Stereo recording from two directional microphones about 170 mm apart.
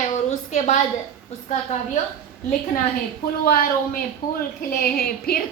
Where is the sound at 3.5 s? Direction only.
60° left (ahead or behind).